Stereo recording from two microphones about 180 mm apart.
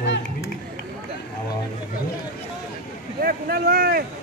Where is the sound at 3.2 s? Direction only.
55° right (ahead or behind).